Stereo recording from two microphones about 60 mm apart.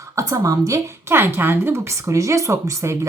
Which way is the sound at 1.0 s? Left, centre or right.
Right.